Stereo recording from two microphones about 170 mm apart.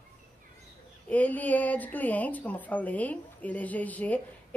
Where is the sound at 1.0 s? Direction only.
10° left (ahead or behind).